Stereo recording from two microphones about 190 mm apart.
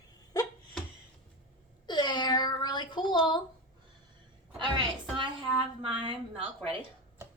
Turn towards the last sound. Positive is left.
turn(degrees=-25)  # may be behind; listen again after turning